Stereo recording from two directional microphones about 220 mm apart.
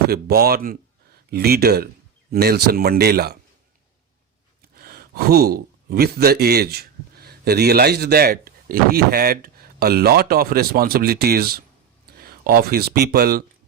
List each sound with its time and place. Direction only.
0.1 s speech: 45° right (ahead or behind)
4.7 s speech: 45° right (ahead or behind)